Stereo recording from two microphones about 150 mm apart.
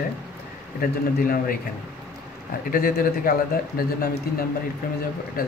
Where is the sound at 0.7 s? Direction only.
70° left (ahead or behind).